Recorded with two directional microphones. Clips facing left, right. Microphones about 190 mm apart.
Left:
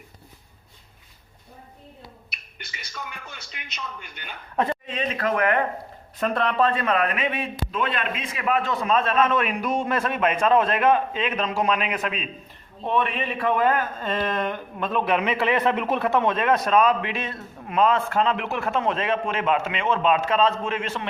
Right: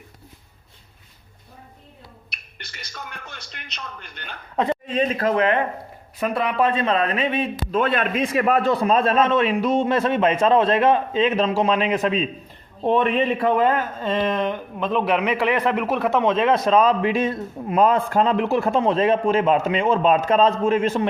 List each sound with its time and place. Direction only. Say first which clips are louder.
2.3 s speech: even; centre (ahead or behind)
4.5 s a sound: right 2 dB; 20° right (ahead or behind)
4.9 s a man's voice: right 5 dB; 35° right (ahead or behind)
6.1 s a man's voice: right 1 dB; 5° right (ahead or behind); by 7.4 s 30° right (ahead or behind)
7.7 s a man's voice: right 7 dB; 45° right (ahead or behind)